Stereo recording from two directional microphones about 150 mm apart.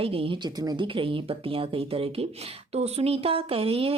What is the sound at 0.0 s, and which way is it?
A woman's voice, 40° right (ahead or behind).